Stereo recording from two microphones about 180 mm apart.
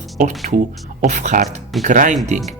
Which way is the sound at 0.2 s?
40° right (ahead or behind).